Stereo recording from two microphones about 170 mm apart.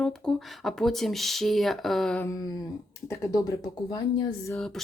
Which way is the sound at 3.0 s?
20° left (ahead or behind).